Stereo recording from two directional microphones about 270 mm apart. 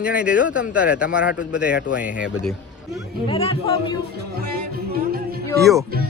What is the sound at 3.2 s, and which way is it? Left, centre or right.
Speech, left.